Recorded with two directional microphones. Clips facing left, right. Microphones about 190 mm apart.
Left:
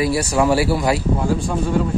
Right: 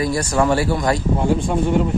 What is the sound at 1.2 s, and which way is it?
Speech, 20° right (ahead or behind).